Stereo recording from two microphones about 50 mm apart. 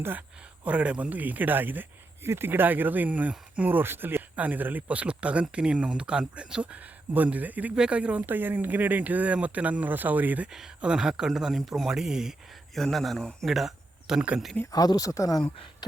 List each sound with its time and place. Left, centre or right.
0.2 s speech: right
2.2 s speech: right
4.4 s speech: right
8.3 s speech: right
10.8 s a man's voice: centre
11.9 s speech: centre
12.7 s a man's voice: centre
14.2 s speech: centre
15.2 s speech: left